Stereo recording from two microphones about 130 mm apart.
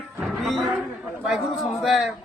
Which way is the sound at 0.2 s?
Centre (ahead or behind).